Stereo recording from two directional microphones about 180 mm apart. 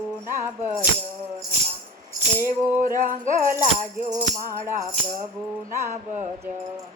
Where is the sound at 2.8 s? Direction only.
50° right (ahead or behind).